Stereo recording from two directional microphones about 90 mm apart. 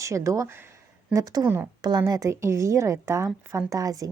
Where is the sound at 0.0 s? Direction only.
35° right (ahead or behind).